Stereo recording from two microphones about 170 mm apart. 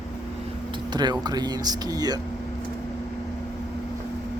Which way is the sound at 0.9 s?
25° right (ahead or behind).